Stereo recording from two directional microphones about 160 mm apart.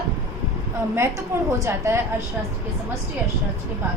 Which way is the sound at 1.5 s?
20° right (ahead or behind).